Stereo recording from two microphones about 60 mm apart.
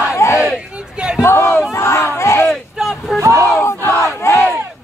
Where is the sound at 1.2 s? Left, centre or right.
Left.